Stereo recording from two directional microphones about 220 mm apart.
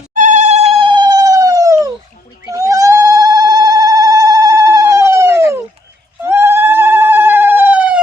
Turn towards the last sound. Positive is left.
turn(degrees=-5)  # may be behind; listen again after turning